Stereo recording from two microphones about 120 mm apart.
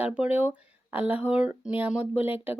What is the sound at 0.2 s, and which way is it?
Speech, 10° right (ahead or behind).